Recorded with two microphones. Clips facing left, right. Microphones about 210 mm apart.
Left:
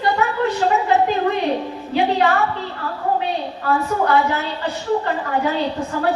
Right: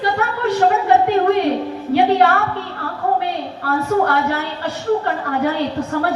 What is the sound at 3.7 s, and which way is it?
A woman's voice, 65° right (ahead or behind).